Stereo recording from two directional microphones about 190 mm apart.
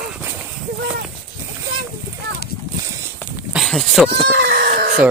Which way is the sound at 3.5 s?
Centre (ahead or behind).